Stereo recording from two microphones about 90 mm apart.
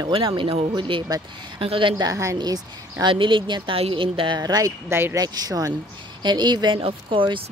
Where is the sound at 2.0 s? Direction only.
40° right (ahead or behind).